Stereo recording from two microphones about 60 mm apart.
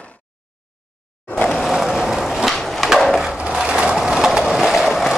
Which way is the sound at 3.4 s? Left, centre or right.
Centre.